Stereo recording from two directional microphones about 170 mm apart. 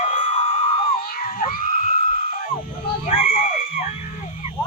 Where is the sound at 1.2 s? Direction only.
55° left (ahead or behind).